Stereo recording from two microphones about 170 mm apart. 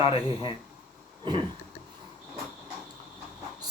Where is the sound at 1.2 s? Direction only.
25° right (ahead or behind).